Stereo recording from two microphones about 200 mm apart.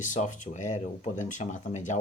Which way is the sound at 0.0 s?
40° left (ahead or behind).